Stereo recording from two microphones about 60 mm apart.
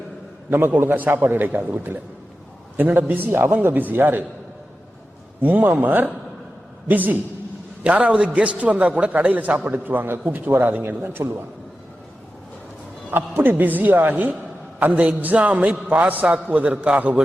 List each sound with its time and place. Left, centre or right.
0.8 s a man's voice: right
5.4 s a man's voice: right
13.1 s a man's voice: right